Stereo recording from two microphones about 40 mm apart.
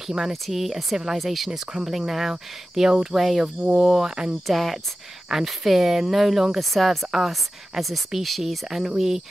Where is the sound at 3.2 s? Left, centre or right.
Centre.